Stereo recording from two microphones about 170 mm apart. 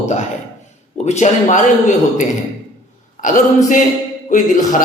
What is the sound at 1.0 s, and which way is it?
Speech, 40° left (ahead or behind).